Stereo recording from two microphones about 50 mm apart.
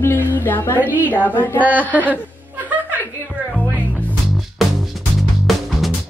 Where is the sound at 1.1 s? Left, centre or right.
Left.